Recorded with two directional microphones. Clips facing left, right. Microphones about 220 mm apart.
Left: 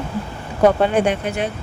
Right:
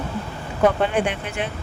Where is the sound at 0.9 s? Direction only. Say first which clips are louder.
Left 5 dB; 40° left (ahead or behind).